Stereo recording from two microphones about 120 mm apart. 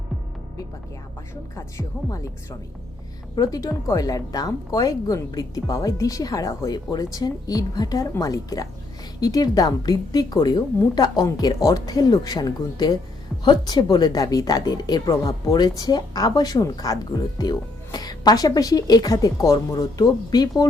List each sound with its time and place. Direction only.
2.0 s a woman's voice: 30° left (ahead or behind)